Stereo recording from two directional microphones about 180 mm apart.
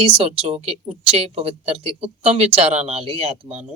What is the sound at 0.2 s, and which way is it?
Speech, 35° right (ahead or behind).